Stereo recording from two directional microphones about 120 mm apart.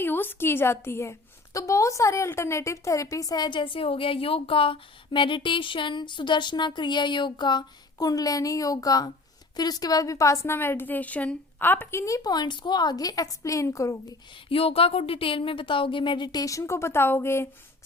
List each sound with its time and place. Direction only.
0.0 s a woman's voice: 15° left (ahead or behind)
14.5 s speech: 50° left (ahead or behind); by 17.5 s 20° left (ahead or behind)